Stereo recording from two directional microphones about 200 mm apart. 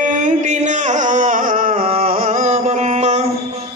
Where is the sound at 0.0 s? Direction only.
40° right (ahead or behind).